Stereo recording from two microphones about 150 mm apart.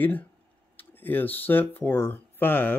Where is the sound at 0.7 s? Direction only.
15° left (ahead or behind).